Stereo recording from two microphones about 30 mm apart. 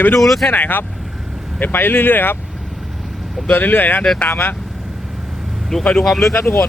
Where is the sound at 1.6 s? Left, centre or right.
Left.